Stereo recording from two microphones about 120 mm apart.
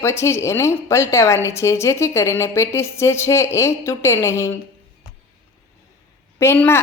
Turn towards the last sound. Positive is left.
turn(degrees=20)  # may be behind; listen again after turning